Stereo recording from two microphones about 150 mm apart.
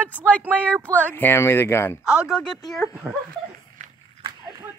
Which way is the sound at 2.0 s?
5° right (ahead or behind).